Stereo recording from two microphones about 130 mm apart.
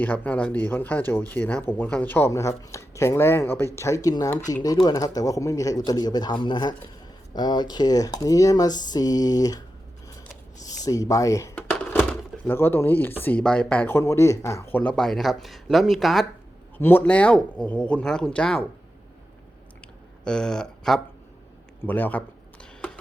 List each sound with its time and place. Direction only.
0.0 s speech: 15° left (ahead or behind)
10.8 s speech: 25° left (ahead or behind)
11.7 s a sound: 15° left (ahead or behind)
12.5 s speech: 15° left (ahead or behind)
14.9 s speech: 5° left (ahead or behind)
16.7 s speech: 15° left (ahead or behind)
20.2 s speech: 5° left (ahead or behind)